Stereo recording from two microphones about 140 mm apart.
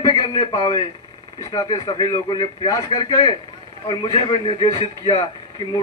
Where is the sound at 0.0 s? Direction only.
25° left (ahead or behind).